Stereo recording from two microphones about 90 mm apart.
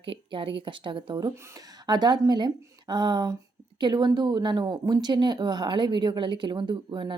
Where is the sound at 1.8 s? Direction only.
50° right (ahead or behind).